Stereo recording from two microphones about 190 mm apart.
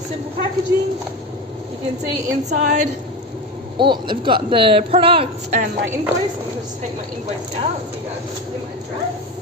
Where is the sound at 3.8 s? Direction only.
25° right (ahead or behind).